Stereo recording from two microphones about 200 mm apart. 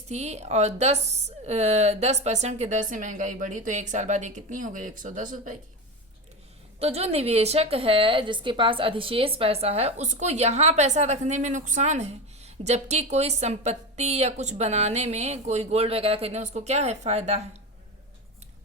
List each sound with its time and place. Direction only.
0.1 s a woman's voice: 35° right (ahead or behind)
6.7 s a woman's voice: 30° right (ahead or behind)